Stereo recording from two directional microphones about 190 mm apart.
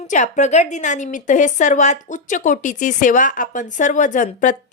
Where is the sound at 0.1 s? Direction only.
40° left (ahead or behind).